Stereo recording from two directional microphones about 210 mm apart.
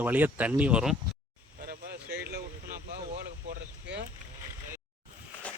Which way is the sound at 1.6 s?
45° right (ahead or behind).